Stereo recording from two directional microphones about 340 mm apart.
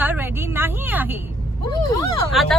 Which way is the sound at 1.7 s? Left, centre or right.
Centre.